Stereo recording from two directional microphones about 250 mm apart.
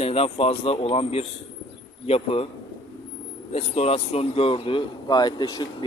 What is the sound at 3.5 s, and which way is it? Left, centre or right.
A man's voice, left.